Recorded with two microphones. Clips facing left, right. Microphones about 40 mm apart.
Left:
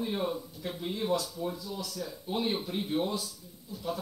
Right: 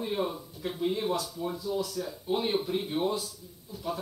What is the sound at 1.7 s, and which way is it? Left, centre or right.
Speech, right.